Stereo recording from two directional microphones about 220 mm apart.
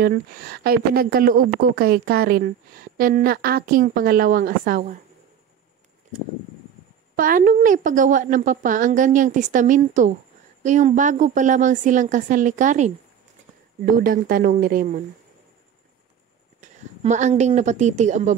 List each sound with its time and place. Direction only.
0.0 s a woman's voice: 45° right (ahead or behind)
7.2 s a woman's voice: 40° right (ahead or behind)
13.9 s a woman's voice: 40° right (ahead or behind)
16.6 s a woman's voice: 35° right (ahead or behind)